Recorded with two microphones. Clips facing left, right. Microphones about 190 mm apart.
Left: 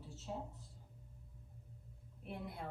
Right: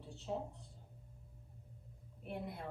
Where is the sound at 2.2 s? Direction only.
Centre (ahead or behind).